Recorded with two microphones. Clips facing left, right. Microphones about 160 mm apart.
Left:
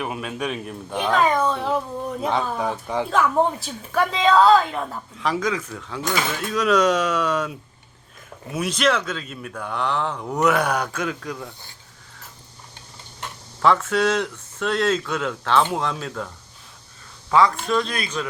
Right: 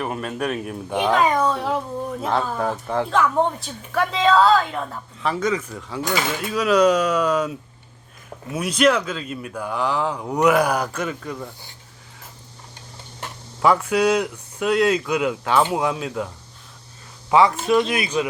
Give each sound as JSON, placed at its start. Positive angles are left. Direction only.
{"t": 0.0, "sound": "speech", "side_deg": 5}
{"t": 8.5, "sound": "speech", "side_deg": -5}
{"t": 13.6, "sound": "speech", "side_deg": -10}
{"t": 17.3, "sound": "speech", "side_deg": -15}